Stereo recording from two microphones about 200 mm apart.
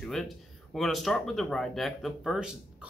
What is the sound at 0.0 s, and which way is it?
Speech, centre (ahead or behind).